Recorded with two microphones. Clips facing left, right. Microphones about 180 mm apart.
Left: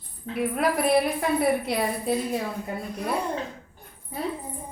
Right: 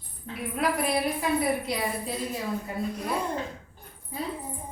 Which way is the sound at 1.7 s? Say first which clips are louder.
Left 4 dB; 60° left (ahead or behind).